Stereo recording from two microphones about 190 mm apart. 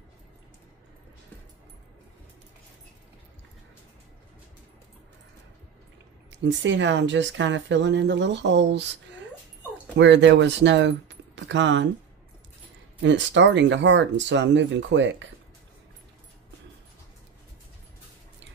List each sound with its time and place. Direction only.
6.4 s speech: 75° right (ahead or behind)
9.9 s speech: 70° right (ahead or behind)
13.0 s speech: 70° right (ahead or behind)